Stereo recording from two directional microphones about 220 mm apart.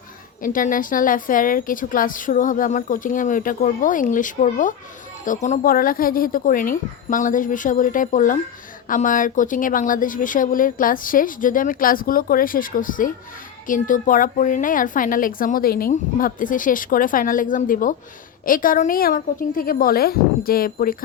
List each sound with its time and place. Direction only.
0.4 s a woman's voice: 40° left (ahead or behind)